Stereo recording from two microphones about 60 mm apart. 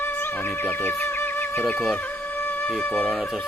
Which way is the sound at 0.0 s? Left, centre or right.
Left.